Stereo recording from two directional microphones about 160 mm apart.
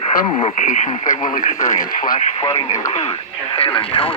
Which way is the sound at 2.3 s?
35° left (ahead or behind).